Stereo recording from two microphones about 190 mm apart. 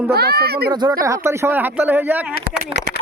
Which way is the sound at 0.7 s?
20° right (ahead or behind).